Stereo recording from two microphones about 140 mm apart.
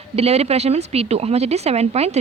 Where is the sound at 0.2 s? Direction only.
50° right (ahead or behind).